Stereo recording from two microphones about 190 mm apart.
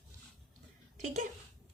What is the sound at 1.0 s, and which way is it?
Speech, 40° right (ahead or behind).